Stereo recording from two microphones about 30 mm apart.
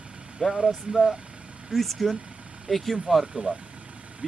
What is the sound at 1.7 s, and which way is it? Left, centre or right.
Speech, centre.